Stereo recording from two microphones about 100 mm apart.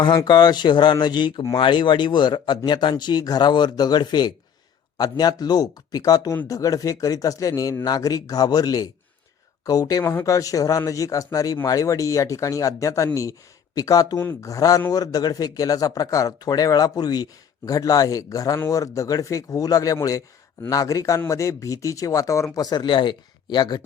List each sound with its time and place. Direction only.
0.3 s speech: 45° left (ahead or behind)
10.0 s speech: 25° left (ahead or behind); by 23.8 s 50° left (ahead or behind)